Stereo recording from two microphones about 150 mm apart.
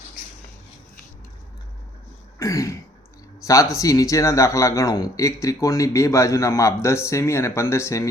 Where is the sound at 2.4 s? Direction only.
20° left (ahead or behind).